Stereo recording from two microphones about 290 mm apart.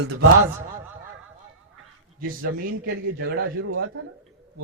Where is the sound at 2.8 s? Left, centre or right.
Right.